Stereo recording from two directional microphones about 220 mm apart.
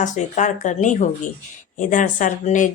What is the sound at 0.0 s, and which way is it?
Speech, 35° left (ahead or behind).